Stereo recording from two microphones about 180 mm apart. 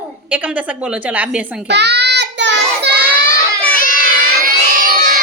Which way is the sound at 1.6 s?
70° right (ahead or behind).